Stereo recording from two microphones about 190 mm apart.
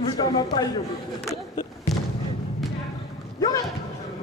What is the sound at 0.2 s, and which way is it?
Speech, 20° left (ahead or behind).